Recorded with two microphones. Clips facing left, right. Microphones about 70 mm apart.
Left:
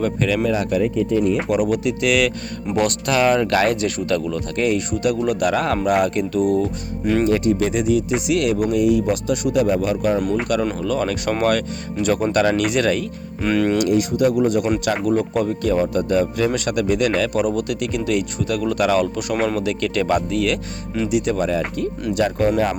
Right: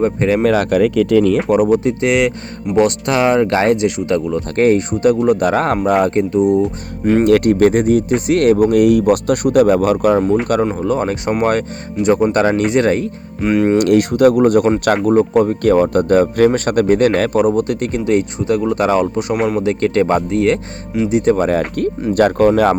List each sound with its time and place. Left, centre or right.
0.0 s speech: right
0.4 s speech: right
1.5 s speech: right
4.5 s speech: right
7.0 s speech: right
7.3 s speech: right
10.6 s speech: right
13.4 s speech: right
13.7 s speech: right
15.0 s speech: right
15.6 s speech: right
22.1 s speech: right